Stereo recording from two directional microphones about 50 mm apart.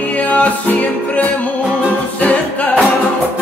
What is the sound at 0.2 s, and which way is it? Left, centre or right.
Music, left.